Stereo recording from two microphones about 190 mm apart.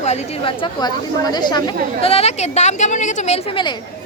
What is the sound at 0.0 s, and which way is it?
A woman's voice, 30° left (ahead or behind).